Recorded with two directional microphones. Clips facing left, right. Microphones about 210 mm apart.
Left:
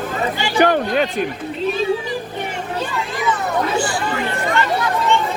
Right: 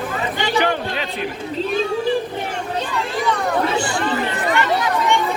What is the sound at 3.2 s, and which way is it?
Chatter, 5° left (ahead or behind).